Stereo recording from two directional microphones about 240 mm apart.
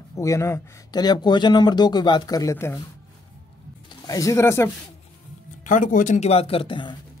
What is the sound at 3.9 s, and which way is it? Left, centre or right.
Speech, centre.